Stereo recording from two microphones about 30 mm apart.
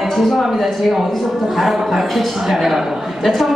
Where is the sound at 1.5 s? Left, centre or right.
Centre.